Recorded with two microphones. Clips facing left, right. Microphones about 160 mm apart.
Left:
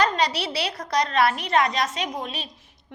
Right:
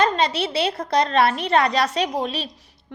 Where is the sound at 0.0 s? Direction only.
25° right (ahead or behind).